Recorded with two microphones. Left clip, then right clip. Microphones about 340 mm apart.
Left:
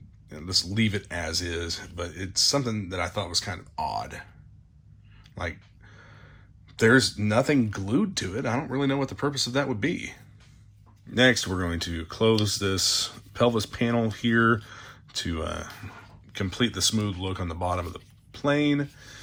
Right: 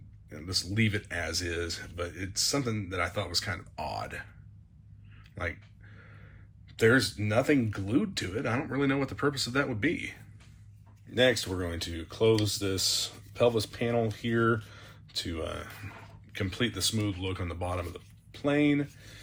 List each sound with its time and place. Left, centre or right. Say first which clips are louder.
0.3 s speech: left 6 dB; centre
5.4 s a sound: left 2 dB; centre
6.7 s speech: left 4 dB; centre